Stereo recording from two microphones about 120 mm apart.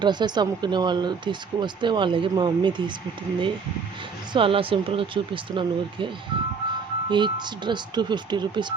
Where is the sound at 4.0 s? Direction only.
45° right (ahead or behind).